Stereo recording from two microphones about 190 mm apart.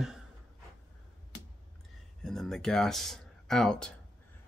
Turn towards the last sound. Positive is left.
turn(degrees=5)  # may be behind; listen again after turning